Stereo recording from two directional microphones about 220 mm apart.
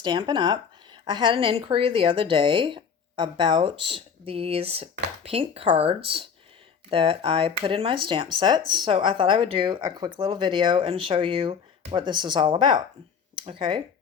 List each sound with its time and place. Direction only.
0.0 s speech: 20° right (ahead or behind)